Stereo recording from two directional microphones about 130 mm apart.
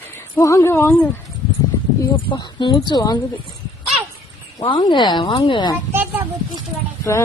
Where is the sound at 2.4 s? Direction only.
35° left (ahead or behind).